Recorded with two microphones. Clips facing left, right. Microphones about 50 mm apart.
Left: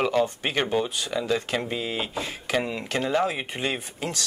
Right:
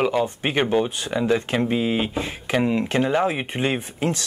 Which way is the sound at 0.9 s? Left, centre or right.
Right.